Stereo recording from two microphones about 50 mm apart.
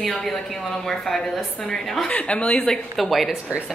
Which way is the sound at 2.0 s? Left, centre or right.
Left.